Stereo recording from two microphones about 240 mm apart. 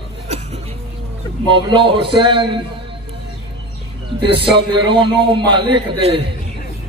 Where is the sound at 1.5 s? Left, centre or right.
Centre.